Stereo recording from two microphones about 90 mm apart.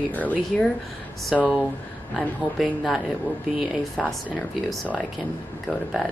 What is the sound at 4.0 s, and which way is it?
Speech, centre (ahead or behind).